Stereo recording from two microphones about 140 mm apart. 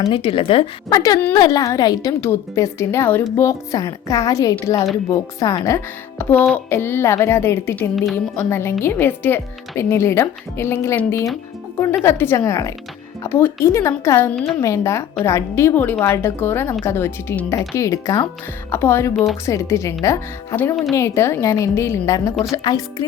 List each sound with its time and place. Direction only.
0.0 s speech: 40° left (ahead or behind)
0.9 s a woman's voice: 25° left (ahead or behind)
19.1 s speech: centre (ahead or behind)
19.5 s a woman's voice: 20° left (ahead or behind)